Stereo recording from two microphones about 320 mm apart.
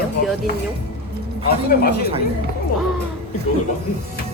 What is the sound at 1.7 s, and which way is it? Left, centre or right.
Speech, left.